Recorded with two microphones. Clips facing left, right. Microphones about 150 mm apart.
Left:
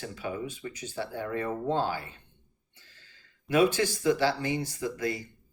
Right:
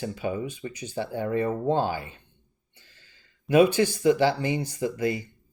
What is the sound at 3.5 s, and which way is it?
Speech, 15° right (ahead or behind).